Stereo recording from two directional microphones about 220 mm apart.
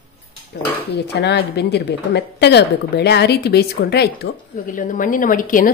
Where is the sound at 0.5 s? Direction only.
45° left (ahead or behind).